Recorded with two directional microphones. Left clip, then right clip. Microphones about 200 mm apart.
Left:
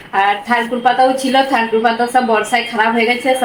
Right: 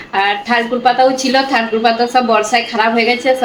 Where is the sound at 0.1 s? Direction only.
Centre (ahead or behind).